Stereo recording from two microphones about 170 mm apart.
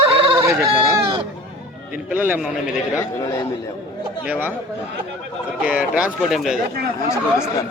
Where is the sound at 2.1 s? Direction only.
10° right (ahead or behind).